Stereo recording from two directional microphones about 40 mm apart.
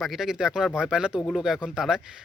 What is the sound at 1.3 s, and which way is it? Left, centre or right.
Speech, centre.